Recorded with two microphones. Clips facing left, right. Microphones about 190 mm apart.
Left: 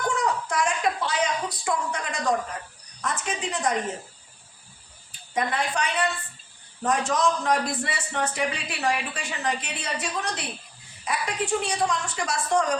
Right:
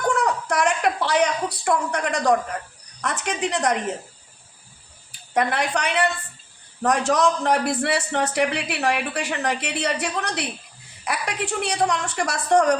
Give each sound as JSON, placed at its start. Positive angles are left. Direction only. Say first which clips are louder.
{"t": 0.1, "sound": "a sound", "louder": "right 4 dB", "side_deg": -70}
{"t": 3.0, "sound": "speech", "louder": "right 4 dB", "side_deg": -70}
{"t": 5.3, "sound": "speech", "louder": "right 4 dB", "side_deg": -70}